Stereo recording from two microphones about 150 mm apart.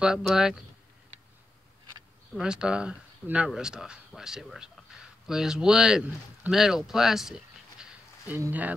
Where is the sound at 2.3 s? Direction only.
5° right (ahead or behind).